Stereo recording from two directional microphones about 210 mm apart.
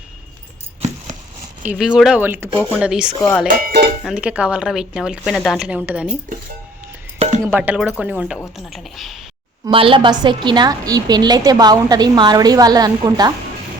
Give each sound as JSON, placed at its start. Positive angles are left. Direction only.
{"t": 1.6, "sound": "speech", "side_deg": -5}
{"t": 3.4, "sound": "speech", "side_deg": -45}
{"t": 4.0, "sound": "speech", "side_deg": -5}
{"t": 7.2, "sound": "music", "side_deg": -35}
{"t": 7.4, "sound": "speech", "side_deg": -10}
{"t": 9.6, "sound": "a woman's voice", "side_deg": -25}